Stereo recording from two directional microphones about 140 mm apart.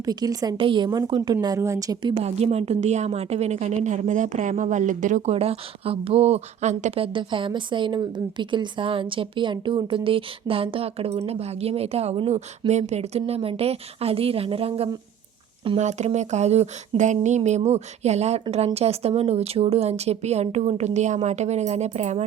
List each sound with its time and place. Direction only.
0.0 s a woman's voice: 25° right (ahead or behind)
2.2 s a woman's voice: 50° right (ahead or behind)
15.8 s a woman's voice: 55° right (ahead or behind)